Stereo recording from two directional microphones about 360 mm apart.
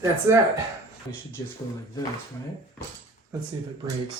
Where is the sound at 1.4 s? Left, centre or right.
Centre.